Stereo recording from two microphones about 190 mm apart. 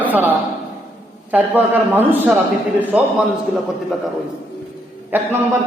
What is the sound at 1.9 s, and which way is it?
Speech, 10° right (ahead or behind).